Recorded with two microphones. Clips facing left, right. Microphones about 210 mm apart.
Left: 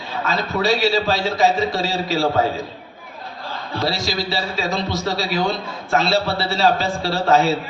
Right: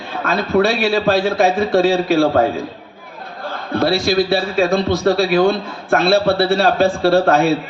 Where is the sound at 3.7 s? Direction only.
55° right (ahead or behind).